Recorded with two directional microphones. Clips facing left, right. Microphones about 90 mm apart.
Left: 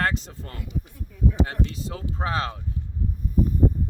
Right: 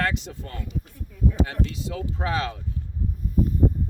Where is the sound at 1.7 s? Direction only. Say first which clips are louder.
Right 2 dB; 35° left (ahead or behind).